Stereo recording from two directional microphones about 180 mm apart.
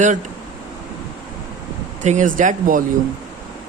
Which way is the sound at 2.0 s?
45° right (ahead or behind).